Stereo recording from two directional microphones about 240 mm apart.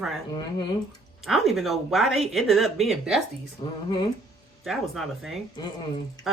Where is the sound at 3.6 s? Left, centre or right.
Left.